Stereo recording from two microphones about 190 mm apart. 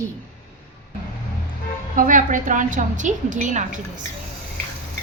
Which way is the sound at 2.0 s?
45° right (ahead or behind).